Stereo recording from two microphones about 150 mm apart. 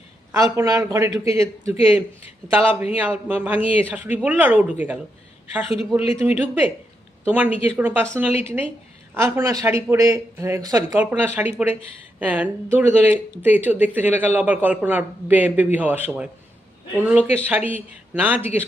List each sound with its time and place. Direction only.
0.3 s speech: 20° right (ahead or behind)
6.2 s speech: 10° right (ahead or behind)
11.0 s speech: 10° right (ahead or behind)